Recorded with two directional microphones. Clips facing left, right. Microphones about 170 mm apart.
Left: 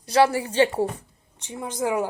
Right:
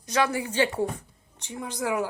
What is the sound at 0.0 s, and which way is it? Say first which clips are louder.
A woman's voice: left 6 dB; 35° left (ahead or behind).